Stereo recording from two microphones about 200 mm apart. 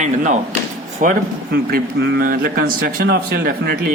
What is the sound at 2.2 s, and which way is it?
Speech, 45° right (ahead or behind).